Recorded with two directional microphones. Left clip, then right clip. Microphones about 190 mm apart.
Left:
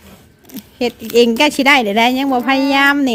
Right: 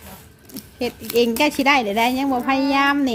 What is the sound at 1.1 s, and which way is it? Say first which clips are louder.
A woman's voice: left 6 dB; 35° left (ahead or behind).